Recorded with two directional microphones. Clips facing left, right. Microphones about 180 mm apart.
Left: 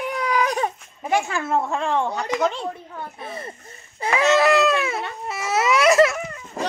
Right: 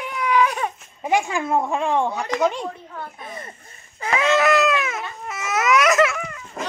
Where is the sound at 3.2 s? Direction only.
30° left (ahead or behind).